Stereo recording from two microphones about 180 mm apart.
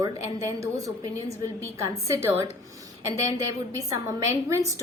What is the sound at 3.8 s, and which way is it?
A woman's voice, 15° right (ahead or behind).